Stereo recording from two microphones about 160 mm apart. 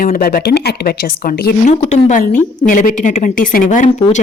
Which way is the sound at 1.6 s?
50° left (ahead or behind).